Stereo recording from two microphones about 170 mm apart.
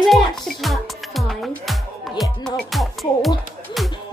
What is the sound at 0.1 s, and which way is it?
Music, centre (ahead or behind).